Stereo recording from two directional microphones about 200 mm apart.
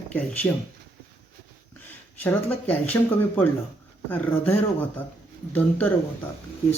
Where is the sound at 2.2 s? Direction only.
10° left (ahead or behind).